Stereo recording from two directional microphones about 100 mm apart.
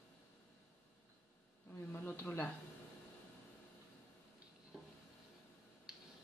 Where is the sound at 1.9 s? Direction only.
20° left (ahead or behind).